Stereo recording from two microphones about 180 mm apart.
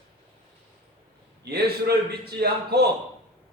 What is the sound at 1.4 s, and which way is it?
A man's voice, 60° right (ahead or behind).